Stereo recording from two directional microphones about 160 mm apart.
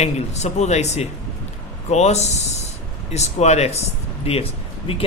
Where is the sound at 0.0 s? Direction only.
45° left (ahead or behind).